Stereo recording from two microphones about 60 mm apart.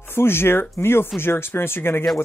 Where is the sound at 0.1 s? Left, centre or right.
Left.